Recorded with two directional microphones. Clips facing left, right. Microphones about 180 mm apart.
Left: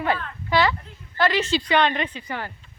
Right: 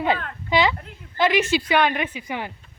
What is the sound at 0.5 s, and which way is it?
Speech, 15° right (ahead or behind).